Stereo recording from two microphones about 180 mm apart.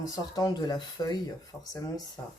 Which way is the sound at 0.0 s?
20° left (ahead or behind).